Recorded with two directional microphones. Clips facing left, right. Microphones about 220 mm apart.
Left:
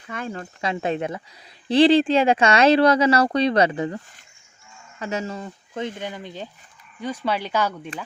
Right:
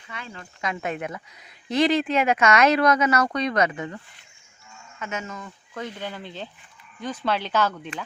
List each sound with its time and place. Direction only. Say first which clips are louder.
0.1 s speech: left 9 dB; 45° left (ahead or behind)
0.6 s speech: left 4 dB; 30° left (ahead or behind)
6.0 s speech: left 2 dB; 15° left (ahead or behind)